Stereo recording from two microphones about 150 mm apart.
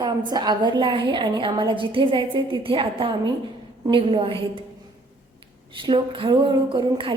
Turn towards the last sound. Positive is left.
turn(degrees=-30)  # may be behind; listen again after turning